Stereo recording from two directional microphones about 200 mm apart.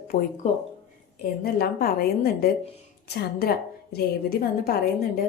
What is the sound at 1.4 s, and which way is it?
A woman's voice, 50° left (ahead or behind).